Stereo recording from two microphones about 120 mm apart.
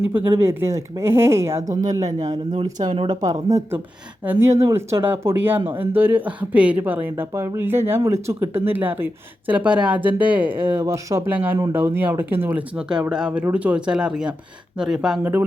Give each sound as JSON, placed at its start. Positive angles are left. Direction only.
{"t": 0.1, "sound": "speech", "side_deg": -20}
{"t": 4.2, "sound": "speech", "side_deg": -15}
{"t": 15.2, "sound": "speech", "side_deg": -15}